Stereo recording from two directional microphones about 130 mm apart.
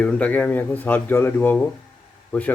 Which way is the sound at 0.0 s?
10° left (ahead or behind).